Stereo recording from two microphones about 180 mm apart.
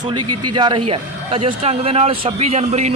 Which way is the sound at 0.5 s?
25° right (ahead or behind).